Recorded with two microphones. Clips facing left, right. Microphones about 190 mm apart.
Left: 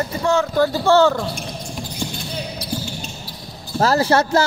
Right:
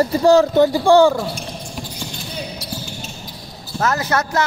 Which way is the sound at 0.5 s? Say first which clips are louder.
Right 3 dB; 15° right (ahead or behind).